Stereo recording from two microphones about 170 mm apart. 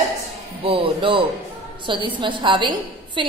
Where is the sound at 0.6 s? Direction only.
30° right (ahead or behind).